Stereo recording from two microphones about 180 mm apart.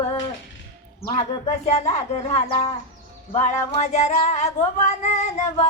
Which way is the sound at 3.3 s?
40° left (ahead or behind).